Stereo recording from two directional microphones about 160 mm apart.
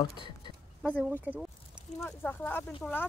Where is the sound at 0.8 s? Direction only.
5° left (ahead or behind).